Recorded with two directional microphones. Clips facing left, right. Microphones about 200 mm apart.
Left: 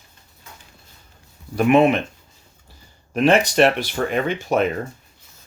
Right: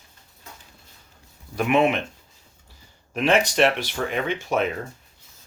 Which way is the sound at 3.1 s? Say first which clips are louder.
Left 4 dB; 35° left (ahead or behind).